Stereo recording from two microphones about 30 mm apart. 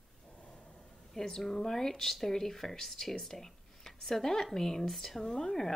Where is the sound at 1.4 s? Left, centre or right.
Centre.